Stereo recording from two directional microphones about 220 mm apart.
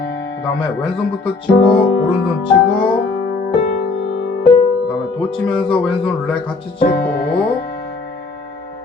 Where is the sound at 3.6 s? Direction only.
30° left (ahead or behind).